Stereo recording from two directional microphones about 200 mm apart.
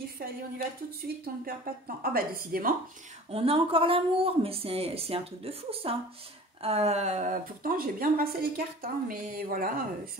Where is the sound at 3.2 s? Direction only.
30° right (ahead or behind).